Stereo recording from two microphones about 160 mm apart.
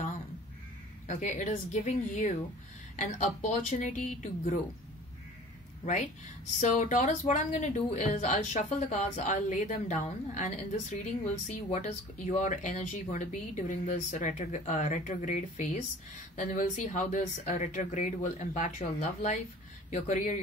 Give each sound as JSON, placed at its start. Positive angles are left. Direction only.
{"t": 1.0, "sound": "speech", "side_deg": 50}
{"t": 6.6, "sound": "speech", "side_deg": 50}